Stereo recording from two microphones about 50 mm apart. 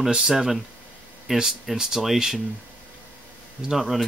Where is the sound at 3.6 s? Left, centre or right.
Centre.